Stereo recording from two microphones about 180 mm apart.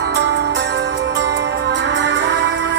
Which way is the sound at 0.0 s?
75° right (ahead or behind).